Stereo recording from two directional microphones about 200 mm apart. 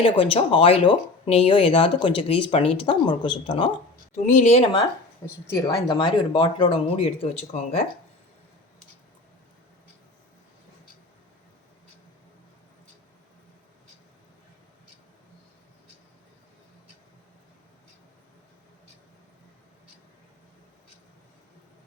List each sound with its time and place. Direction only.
0.0 s speech: 25° left (ahead or behind)
4.1 s speech: 35° left (ahead or behind)
5.2 s speech: 15° left (ahead or behind); by 7.9 s 35° left (ahead or behind)